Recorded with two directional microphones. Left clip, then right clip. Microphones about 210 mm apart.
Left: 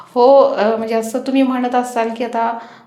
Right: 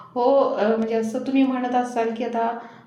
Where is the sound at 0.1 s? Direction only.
15° left (ahead or behind).